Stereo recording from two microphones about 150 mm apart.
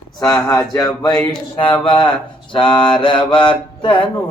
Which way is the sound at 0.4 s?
20° left (ahead or behind).